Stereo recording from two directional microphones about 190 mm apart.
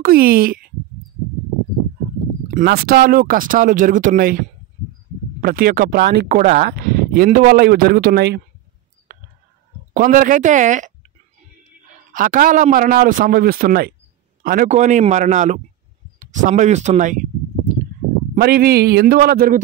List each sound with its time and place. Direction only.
0.0 s speech: 50° right (ahead or behind)
2.5 s speech: 50° right (ahead or behind)
6.2 s a man's voice: 40° right (ahead or behind)
6.7 s speech: 50° right (ahead or behind)
9.1 s a sound: 45° right (ahead or behind)
9.9 s speech: 45° right (ahead or behind)
12.1 s a man's voice: 45° right (ahead or behind)
18.3 s speech: 55° right (ahead or behind)